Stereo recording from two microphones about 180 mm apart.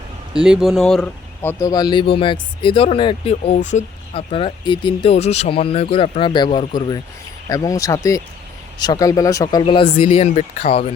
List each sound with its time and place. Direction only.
0.4 s speech: 5° right (ahead or behind); by 10.8 s 35° left (ahead or behind)